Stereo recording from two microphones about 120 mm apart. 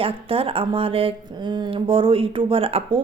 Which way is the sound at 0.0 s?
50° right (ahead or behind).